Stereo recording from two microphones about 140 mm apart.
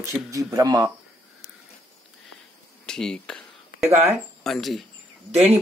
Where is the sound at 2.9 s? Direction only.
5° left (ahead or behind).